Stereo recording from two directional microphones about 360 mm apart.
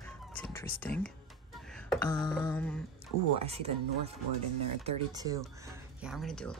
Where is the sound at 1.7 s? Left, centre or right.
Centre.